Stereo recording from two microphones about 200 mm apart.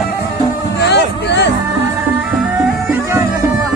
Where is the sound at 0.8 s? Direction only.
60° left (ahead or behind).